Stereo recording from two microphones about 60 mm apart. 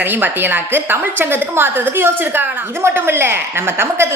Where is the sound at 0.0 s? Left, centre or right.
Right.